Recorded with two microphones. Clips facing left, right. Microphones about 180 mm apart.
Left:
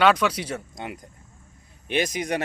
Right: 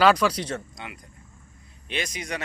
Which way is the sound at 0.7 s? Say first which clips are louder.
Left 5 dB; 45° left (ahead or behind).